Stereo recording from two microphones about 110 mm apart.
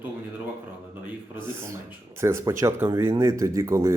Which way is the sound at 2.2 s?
25° right (ahead or behind).